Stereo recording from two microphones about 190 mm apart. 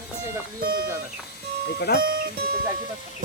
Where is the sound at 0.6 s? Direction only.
50° right (ahead or behind).